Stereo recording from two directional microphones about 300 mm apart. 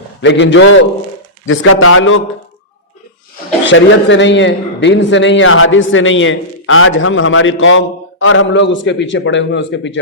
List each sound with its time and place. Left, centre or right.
0.2 s a man's voice: left
3.7 s a man's voice: left